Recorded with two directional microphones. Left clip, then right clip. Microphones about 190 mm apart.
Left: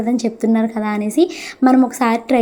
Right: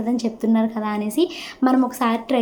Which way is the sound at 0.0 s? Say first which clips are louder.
Left 5 dB; 25° left (ahead or behind).